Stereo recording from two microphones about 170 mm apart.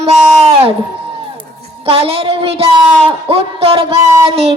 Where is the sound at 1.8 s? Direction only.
35° right (ahead or behind).